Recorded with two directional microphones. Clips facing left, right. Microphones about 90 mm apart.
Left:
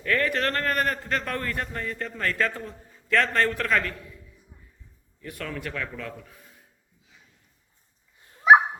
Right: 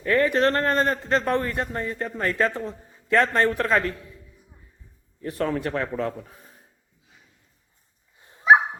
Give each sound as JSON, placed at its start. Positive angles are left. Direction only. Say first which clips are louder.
{"t": 0.0, "sound": "a man's voice", "louder": "right 5 dB", "side_deg": -20}
{"t": 5.2, "sound": "a man's voice", "louder": "right 9 dB", "side_deg": -35}
{"t": 8.2, "sound": "dog", "louder": "right 1 dB", "side_deg": -25}